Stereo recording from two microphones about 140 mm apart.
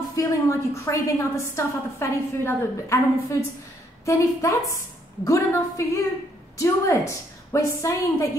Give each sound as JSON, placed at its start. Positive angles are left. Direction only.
{"t": 0.1, "sound": "a woman's voice", "side_deg": 20}